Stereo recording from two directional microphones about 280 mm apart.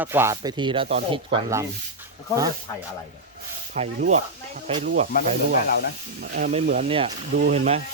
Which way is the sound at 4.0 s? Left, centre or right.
Right.